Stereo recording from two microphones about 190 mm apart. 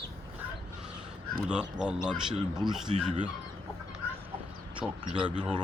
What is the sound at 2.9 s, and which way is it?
Speech, 35° right (ahead or behind).